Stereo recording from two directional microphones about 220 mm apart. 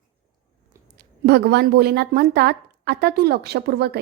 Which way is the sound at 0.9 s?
50° right (ahead or behind).